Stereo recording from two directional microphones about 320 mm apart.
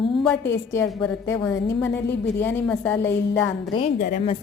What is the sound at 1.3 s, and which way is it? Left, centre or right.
A woman's voice, centre.